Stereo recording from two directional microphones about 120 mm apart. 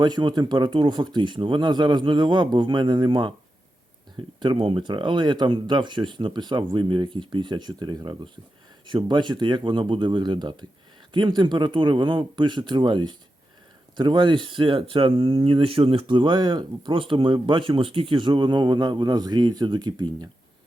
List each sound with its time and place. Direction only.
0.0 s speech: 40° right (ahead or behind)
4.4 s speech: 40° right (ahead or behind)